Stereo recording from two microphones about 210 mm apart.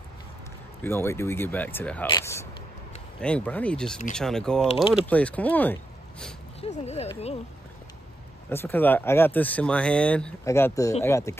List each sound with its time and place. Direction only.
0.8 s speech: 10° left (ahead or behind)
6.6 s speech: 30° left (ahead or behind)
8.5 s speech: 10° left (ahead or behind)